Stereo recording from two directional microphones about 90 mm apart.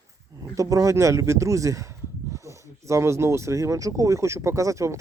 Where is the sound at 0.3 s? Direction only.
40° right (ahead or behind).